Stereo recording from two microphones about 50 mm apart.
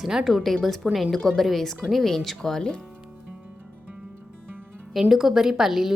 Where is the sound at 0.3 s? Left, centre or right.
Centre.